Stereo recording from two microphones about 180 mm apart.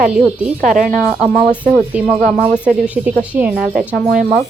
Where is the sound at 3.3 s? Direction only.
5° right (ahead or behind).